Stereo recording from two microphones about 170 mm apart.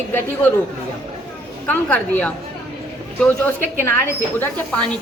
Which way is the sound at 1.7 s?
10° left (ahead or behind).